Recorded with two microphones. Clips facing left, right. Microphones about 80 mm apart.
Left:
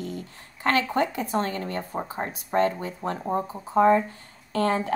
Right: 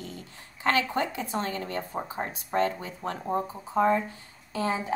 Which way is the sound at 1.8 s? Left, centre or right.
Centre.